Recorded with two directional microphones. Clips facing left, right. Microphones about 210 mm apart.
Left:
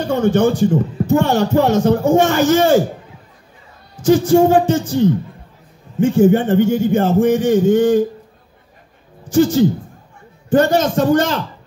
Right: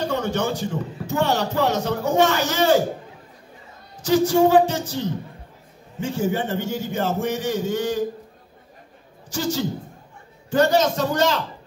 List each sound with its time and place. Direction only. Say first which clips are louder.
0.0 s a man's voice: left 9 dB; 50° left (ahead or behind)
3.9 s a man's voice: left 6 dB; 50° left (ahead or behind)
9.3 s a man's voice: left 12 dB; 50° left (ahead or behind)